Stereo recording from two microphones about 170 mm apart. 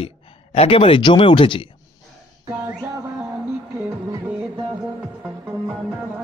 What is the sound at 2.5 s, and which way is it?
Music, 10° right (ahead or behind).